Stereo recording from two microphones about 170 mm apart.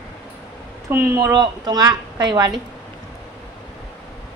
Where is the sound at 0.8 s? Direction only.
15° right (ahead or behind).